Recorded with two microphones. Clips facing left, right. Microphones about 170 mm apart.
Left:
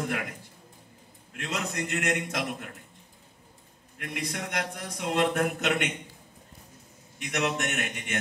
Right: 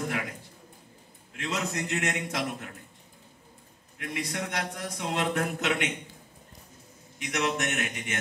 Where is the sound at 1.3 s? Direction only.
50° left (ahead or behind).